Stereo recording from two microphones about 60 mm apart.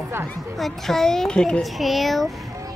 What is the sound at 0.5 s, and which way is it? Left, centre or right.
A child's voice, centre.